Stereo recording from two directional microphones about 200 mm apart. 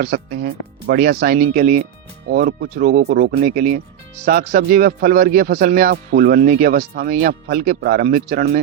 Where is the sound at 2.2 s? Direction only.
55° right (ahead or behind).